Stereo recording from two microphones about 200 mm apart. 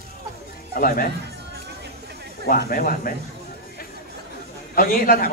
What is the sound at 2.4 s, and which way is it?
Speech, 45° left (ahead or behind).